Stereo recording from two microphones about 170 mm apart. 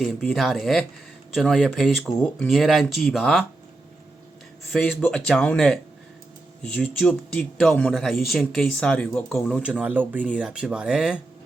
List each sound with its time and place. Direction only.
0.0 s a man's voice: 5° left (ahead or behind)
4.7 s a man's voice: centre (ahead or behind)